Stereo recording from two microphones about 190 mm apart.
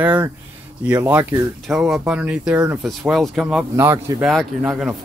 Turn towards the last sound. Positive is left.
turn(degrees=0)  # may be behind; listen again after turning